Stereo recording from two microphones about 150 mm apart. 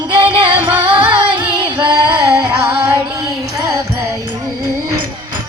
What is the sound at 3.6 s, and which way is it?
Music, 20° right (ahead or behind).